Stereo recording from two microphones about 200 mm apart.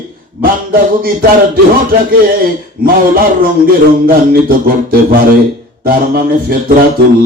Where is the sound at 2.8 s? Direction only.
45° right (ahead or behind).